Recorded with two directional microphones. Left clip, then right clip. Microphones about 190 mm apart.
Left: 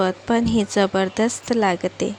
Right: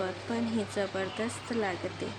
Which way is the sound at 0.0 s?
50° left (ahead or behind).